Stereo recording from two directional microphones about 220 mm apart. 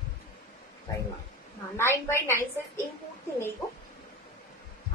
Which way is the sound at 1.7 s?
10° left (ahead or behind).